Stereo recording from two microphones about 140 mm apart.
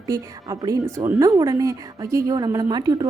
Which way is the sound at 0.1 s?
25° right (ahead or behind).